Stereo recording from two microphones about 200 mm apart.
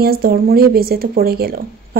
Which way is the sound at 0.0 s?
50° right (ahead or behind).